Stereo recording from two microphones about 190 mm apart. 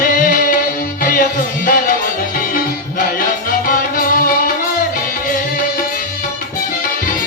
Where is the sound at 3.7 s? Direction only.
45° left (ahead or behind).